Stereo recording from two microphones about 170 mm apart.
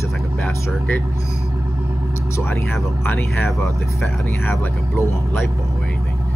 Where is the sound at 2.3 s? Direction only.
15° left (ahead or behind).